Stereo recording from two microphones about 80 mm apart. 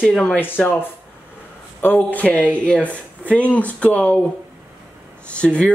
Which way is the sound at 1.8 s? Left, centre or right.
Left.